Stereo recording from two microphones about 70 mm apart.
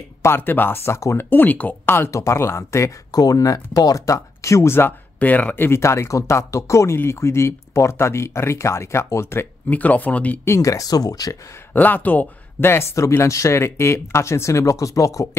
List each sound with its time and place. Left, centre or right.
0.4 s speech: left
1.3 s speech: left
2.0 s speech: left
3.1 s speech: left
4.7 s speech: left
5.7 s speech: left
9.7 s speech: left
10.4 s speech: left
11.7 s speech: left